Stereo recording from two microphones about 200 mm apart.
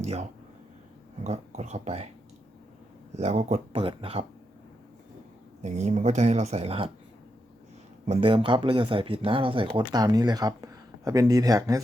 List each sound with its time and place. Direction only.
0.0 s speech: 35° right (ahead or behind)
3.2 s speech: 35° right (ahead or behind)
5.6 s speech: 35° right (ahead or behind)
8.0 s speech: 30° right (ahead or behind)